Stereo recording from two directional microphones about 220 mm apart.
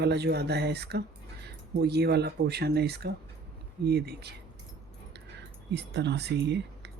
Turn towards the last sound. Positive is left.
turn(degrees=-50)  # may be behind; listen again after turning